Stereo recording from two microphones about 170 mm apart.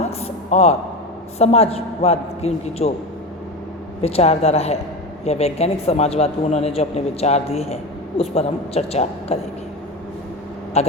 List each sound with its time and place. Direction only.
0.0 s a sound: 40° left (ahead or behind)
1.4 s speech: 35° left (ahead or behind)
4.0 s speech: 35° left (ahead or behind)
10.8 s speech: 40° left (ahead or behind)